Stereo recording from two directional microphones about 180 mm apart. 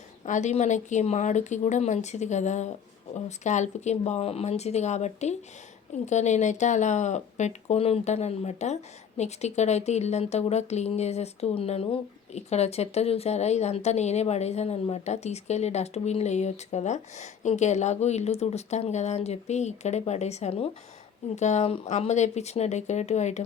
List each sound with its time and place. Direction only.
0.3 s speech: 40° left (ahead or behind)